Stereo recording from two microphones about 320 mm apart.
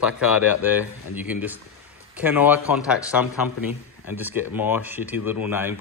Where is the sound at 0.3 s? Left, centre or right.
Left.